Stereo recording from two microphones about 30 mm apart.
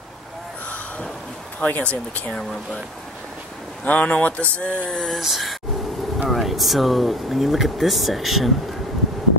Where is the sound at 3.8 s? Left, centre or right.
Left.